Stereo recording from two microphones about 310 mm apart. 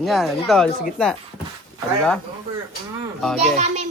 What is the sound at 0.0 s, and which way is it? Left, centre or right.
Speech, centre.